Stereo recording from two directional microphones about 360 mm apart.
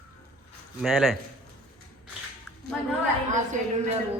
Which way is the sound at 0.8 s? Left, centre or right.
Centre.